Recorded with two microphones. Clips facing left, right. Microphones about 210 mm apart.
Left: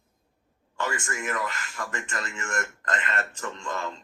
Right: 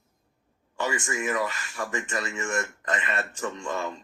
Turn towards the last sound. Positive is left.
turn(degrees=-10)  # may be behind; listen again after turning